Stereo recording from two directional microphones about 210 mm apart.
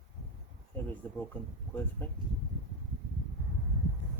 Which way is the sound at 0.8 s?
10° left (ahead or behind).